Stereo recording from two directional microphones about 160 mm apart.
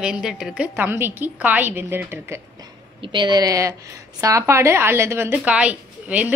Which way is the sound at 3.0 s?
30° right (ahead or behind).